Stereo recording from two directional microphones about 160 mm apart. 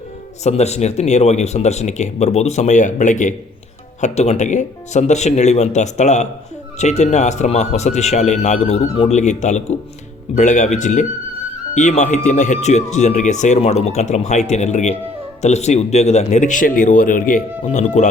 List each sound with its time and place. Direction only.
0.4 s speech: 45° left (ahead or behind)